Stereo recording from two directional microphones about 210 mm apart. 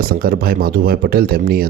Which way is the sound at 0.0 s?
45° right (ahead or behind).